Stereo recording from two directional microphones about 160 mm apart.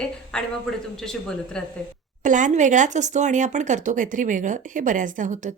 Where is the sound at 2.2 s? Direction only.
50° right (ahead or behind).